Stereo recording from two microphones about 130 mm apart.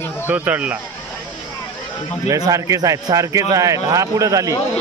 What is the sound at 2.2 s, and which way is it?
Speech, 25° right (ahead or behind).